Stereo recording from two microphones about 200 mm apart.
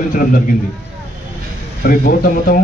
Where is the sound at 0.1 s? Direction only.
45° left (ahead or behind).